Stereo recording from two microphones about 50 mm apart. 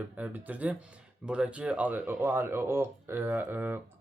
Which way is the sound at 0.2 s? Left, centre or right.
Right.